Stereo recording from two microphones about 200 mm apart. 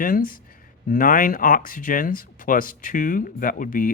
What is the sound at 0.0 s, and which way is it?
Speech, 45° left (ahead or behind).